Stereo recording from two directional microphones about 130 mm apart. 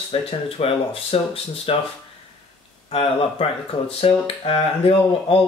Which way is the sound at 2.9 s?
50° left (ahead or behind).